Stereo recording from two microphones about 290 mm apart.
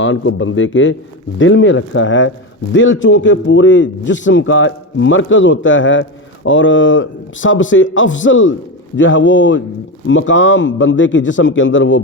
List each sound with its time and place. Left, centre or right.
0.0 s a man's voice: left